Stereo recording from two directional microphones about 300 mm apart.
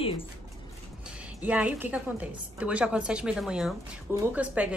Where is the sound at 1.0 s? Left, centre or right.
Centre.